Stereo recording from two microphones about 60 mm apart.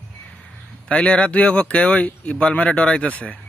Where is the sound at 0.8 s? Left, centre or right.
Centre.